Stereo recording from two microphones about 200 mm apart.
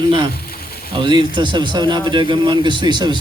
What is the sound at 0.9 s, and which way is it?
Speech, 25° right (ahead or behind).